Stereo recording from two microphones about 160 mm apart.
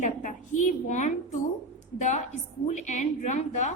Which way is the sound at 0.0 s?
55° left (ahead or behind).